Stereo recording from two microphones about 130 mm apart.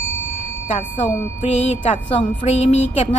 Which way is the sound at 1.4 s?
60° left (ahead or behind).